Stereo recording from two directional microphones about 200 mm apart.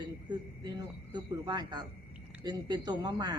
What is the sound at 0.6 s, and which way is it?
Speech, 20° right (ahead or behind).